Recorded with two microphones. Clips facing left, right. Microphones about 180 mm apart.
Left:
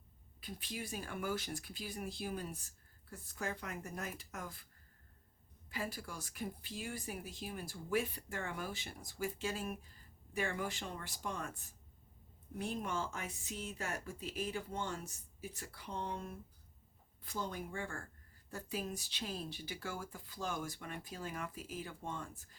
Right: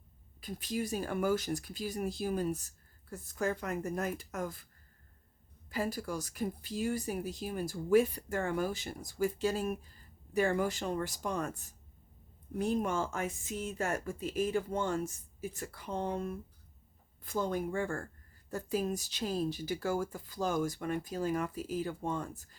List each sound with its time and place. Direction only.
0.3 s speech: 40° right (ahead or behind)
5.7 s speech: 40° right (ahead or behind)